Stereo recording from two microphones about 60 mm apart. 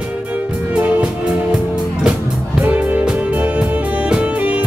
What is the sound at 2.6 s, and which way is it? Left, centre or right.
Music, right.